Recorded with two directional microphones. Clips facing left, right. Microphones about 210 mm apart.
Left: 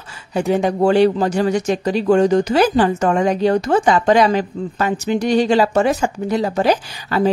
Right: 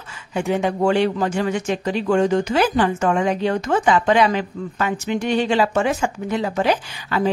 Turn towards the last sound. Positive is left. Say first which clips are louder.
# left 4 dB
turn(degrees=40)  # may be behind; listen again after turning